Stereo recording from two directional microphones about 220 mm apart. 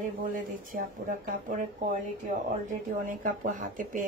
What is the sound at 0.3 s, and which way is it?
Speech, 40° right (ahead or behind).